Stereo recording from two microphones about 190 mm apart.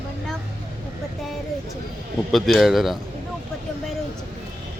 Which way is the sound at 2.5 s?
Centre (ahead or behind).